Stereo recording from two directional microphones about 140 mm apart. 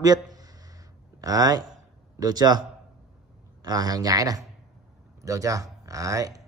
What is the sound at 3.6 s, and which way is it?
A man's voice, 25° right (ahead or behind).